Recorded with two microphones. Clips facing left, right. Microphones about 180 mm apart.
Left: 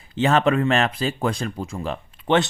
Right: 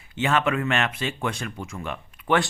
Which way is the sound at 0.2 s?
35° left (ahead or behind).